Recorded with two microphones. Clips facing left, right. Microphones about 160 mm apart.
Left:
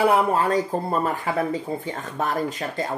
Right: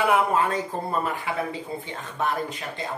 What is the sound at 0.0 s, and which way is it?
Speech, 35° left (ahead or behind).